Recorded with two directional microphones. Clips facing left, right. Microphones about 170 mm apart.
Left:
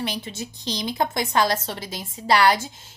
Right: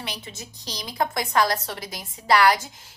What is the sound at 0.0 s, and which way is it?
Speech, 30° left (ahead or behind).